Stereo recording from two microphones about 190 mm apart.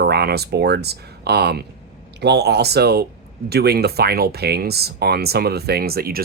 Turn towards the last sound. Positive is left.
turn(degrees=-55)  # may be behind; listen again after turning